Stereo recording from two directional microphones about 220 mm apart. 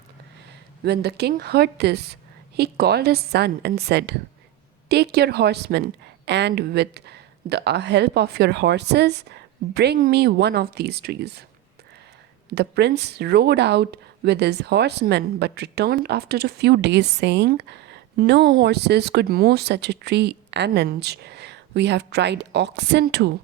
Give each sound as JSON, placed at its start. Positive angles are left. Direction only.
{"t": 0.9, "sound": "speech", "side_deg": -50}
{"t": 12.5, "sound": "speech", "side_deg": -50}